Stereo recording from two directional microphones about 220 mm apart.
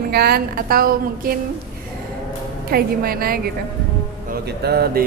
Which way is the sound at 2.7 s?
40° right (ahead or behind).